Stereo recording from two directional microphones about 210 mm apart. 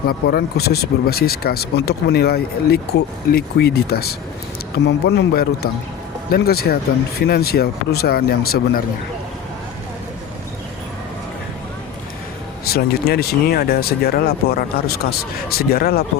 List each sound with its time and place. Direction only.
0.0 s speech: 45° left (ahead or behind)
12.6 s speech: 50° left (ahead or behind)